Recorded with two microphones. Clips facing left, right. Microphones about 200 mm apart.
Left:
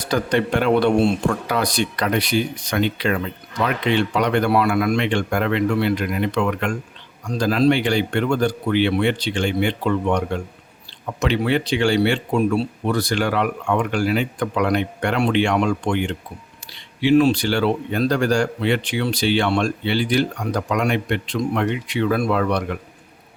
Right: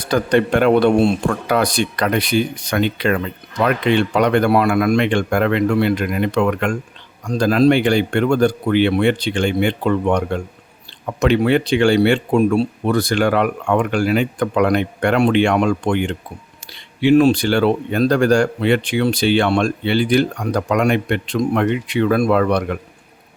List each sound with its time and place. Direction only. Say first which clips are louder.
0.0 s speech: right 4 dB; 50° right (ahead or behind)